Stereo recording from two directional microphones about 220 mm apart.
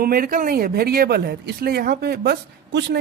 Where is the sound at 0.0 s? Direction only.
40° right (ahead or behind).